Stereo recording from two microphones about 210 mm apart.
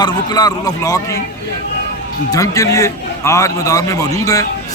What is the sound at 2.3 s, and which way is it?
A man's voice, 15° left (ahead or behind).